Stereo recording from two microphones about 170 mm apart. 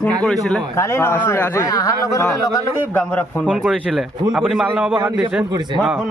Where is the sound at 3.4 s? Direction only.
5° right (ahead or behind).